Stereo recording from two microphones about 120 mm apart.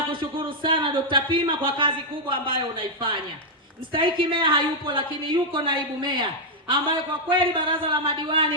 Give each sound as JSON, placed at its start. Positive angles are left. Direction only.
{"t": 0.1, "sound": "speech", "side_deg": -45}